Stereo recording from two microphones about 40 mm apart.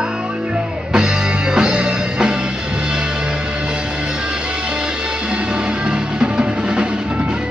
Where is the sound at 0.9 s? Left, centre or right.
Right.